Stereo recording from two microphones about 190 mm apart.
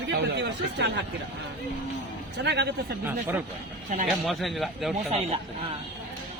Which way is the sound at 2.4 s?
65° right (ahead or behind).